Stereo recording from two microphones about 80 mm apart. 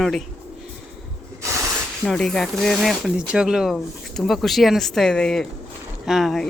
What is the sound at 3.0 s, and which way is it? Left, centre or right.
Speech, centre.